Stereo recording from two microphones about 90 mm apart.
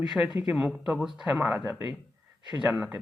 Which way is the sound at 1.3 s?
20° right (ahead or behind).